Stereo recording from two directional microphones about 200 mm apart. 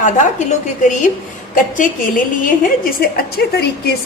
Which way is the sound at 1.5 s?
40° left (ahead or behind).